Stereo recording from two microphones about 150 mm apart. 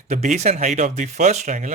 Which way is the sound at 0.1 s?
55° right (ahead or behind).